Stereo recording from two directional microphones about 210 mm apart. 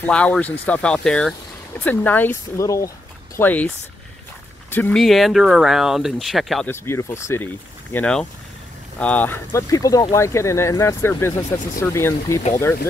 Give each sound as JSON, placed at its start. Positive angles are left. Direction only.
{"t": 0.0, "sound": "speech", "side_deg": 5}
{"t": 6.7, "sound": "speech", "side_deg": 10}